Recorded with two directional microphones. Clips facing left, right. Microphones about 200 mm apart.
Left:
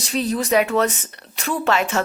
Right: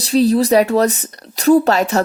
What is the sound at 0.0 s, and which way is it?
Speech, 35° right (ahead or behind).